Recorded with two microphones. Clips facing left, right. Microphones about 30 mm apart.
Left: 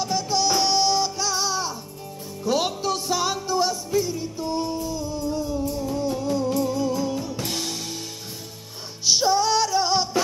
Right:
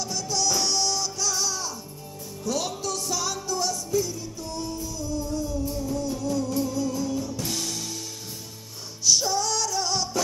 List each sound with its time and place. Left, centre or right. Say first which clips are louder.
0.0 s music: left 5 dB; left
9.0 s music: left 4 dB; left